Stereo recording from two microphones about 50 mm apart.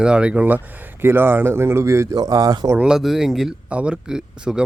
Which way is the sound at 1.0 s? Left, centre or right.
Right.